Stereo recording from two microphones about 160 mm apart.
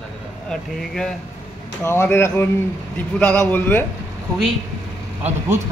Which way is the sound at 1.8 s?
15° left (ahead or behind).